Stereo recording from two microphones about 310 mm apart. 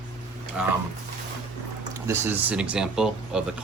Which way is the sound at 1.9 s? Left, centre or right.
Centre.